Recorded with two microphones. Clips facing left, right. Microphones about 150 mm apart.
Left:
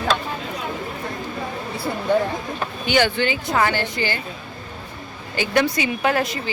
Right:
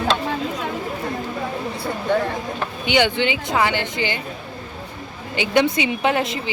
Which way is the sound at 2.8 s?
20° right (ahead or behind).